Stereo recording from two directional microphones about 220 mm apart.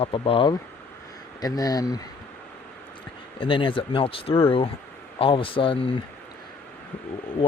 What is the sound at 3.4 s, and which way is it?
Speech, 25° left (ahead or behind).